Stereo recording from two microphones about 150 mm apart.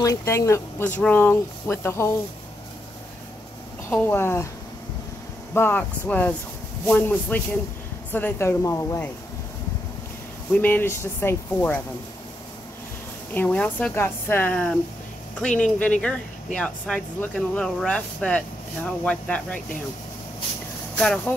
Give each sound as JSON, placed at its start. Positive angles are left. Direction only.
{"t": 0.0, "sound": "speech", "side_deg": 20}
{"t": 3.9, "sound": "speech", "side_deg": 15}
{"t": 5.5, "sound": "speech", "side_deg": 15}
{"t": 10.5, "sound": "speech", "side_deg": 10}
{"t": 13.3, "sound": "speech", "side_deg": 10}
{"t": 21.0, "sound": "speech", "side_deg": 5}